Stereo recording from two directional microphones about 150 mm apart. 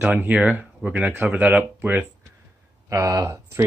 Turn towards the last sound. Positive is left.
turn(degrees=-20)  # may be behind; listen again after turning